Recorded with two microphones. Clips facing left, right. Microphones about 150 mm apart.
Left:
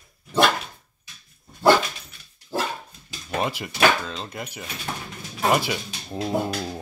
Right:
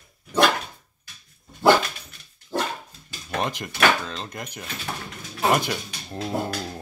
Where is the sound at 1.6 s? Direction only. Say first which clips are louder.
Even; 5° left (ahead or behind).